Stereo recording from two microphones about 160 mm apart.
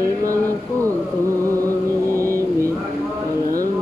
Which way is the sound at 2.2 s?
15° left (ahead or behind).